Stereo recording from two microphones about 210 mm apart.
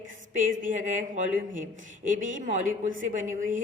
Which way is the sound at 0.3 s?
40° right (ahead or behind).